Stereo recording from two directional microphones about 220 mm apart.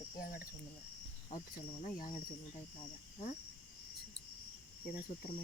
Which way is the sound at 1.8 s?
35° left (ahead or behind).